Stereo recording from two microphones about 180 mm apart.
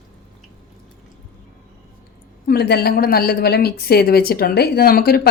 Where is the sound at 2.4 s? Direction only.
60° left (ahead or behind).